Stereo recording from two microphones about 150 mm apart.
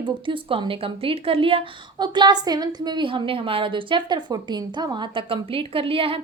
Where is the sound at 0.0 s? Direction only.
35° right (ahead or behind).